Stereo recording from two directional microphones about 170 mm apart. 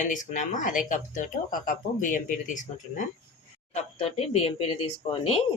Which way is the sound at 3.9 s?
35° left (ahead or behind).